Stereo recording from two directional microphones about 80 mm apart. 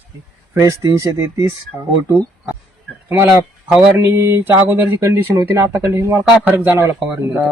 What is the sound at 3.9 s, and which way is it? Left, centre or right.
Speech, right.